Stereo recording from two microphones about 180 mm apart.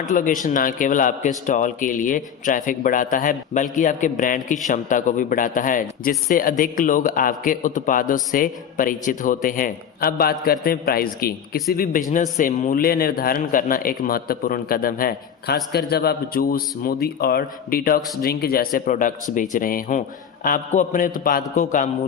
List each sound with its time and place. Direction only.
0.0 s a man's voice: 45° left (ahead or behind)